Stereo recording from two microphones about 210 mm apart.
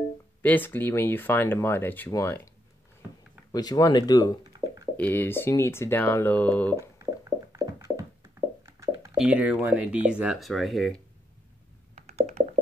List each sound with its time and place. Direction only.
0.4 s speech: 10° left (ahead or behind)
3.5 s speech: 20° left (ahead or behind)
6.8 s a sound: 15° right (ahead or behind)
8.6 s plop: 15° right (ahead or behind)
9.1 s speech: 5° right (ahead or behind)
11.9 s a sound: 30° right (ahead or behind)